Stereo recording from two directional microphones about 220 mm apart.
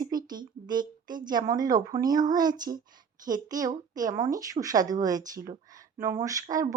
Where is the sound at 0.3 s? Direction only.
20° right (ahead or behind).